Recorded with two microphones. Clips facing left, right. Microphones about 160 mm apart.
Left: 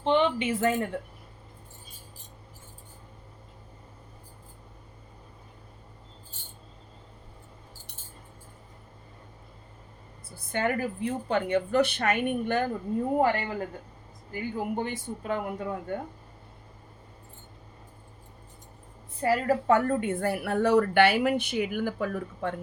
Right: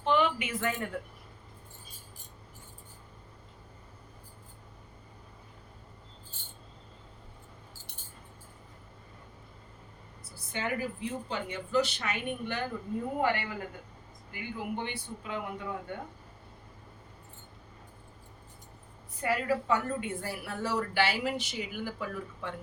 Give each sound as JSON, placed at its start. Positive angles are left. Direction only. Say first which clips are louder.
{"t": 0.0, "sound": "a sound", "louder": "left 4 dB", "side_deg": 30}
{"t": 10.3, "sound": "a woman's voice", "louder": "left 6 dB", "side_deg": 55}
{"t": 13.1, "sound": "a woman's voice", "louder": "left 5 dB", "side_deg": 40}
{"t": 19.2, "sound": "a woman's voice", "louder": "left 5 dB", "side_deg": 35}
{"t": 19.6, "sound": "a woman's voice", "louder": "left 7 dB", "side_deg": 55}